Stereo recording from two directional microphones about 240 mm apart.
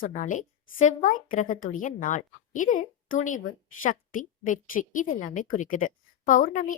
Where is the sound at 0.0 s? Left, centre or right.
Left.